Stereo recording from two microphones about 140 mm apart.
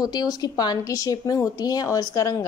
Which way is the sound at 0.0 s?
30° left (ahead or behind).